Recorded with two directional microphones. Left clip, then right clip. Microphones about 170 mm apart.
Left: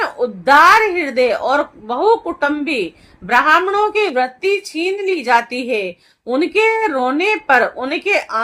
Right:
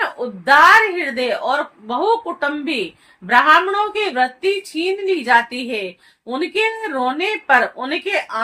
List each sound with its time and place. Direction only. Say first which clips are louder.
0.0 s speech: left 4 dB; 45° left (ahead or behind)